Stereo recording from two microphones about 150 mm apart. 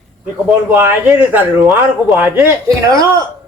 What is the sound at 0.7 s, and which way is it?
Speech, 10° right (ahead or behind).